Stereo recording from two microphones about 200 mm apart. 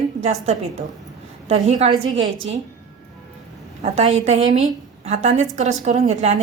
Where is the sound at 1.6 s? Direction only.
35° right (ahead or behind).